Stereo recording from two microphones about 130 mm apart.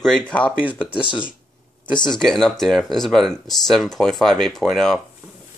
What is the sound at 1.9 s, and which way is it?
Speech, 35° left (ahead or behind).